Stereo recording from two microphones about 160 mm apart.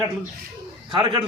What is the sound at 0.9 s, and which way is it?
Speech, 30° right (ahead or behind).